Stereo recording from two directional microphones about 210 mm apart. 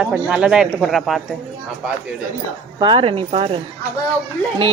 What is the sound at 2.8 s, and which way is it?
Speech, 25° right (ahead or behind).